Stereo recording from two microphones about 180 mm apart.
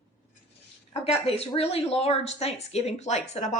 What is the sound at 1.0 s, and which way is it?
A woman's voice, 35° left (ahead or behind).